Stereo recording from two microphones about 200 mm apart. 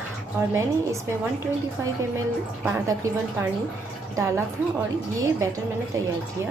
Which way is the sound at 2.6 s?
15° right (ahead or behind).